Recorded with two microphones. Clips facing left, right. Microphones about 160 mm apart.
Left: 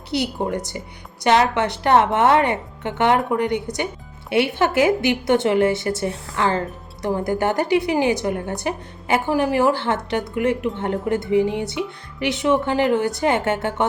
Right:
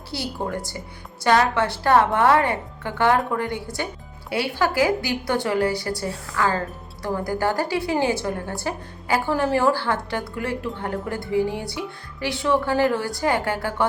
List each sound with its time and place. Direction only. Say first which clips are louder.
0.1 s a woman's voice: left 5 dB; 20° left (ahead or behind)